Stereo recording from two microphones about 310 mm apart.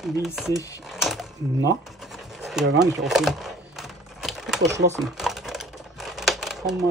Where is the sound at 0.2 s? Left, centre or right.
Centre.